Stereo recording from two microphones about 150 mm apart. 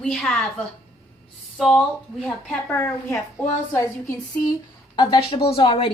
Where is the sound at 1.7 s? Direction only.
10° left (ahead or behind).